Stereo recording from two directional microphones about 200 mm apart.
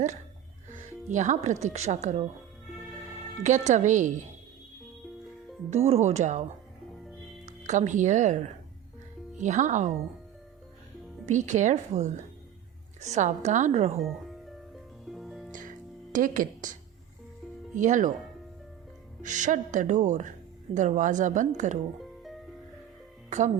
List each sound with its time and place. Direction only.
0.7 s speech: 35° right (ahead or behind)
3.4 s speech: 35° right (ahead or behind)
5.7 s speech: 30° right (ahead or behind)
7.4 s speech: 35° right (ahead or behind)
9.4 s speech: 40° right (ahead or behind)
11.3 s speech: 35° right (ahead or behind)
15.0 s music: centre (ahead or behind)
16.1 s speech: 40° right (ahead or behind)
17.7 s speech: 40° right (ahead or behind)
19.2 s speech: 40° right (ahead or behind)